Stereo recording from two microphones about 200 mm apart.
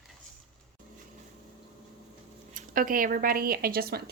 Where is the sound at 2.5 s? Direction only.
40° right (ahead or behind).